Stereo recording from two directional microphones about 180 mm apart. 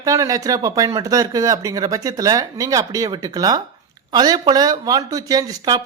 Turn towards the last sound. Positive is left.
turn(degrees=-20)  # may be behind; listen again after turning